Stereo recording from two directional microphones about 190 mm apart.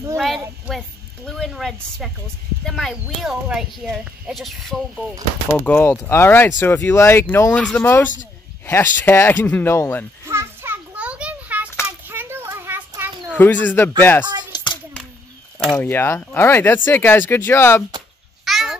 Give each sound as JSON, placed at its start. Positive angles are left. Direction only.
{"t": 0.7, "sound": "speech", "side_deg": 0}
{"t": 10.2, "sound": "a sound", "side_deg": -15}
{"t": 13.3, "sound": "speech", "side_deg": 10}
{"t": 14.5, "sound": "hands", "side_deg": 25}
{"t": 15.7, "sound": "speech", "side_deg": 10}
{"t": 18.4, "sound": "cat", "side_deg": 0}